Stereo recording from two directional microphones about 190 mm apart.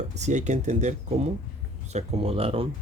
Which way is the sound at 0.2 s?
40° right (ahead or behind).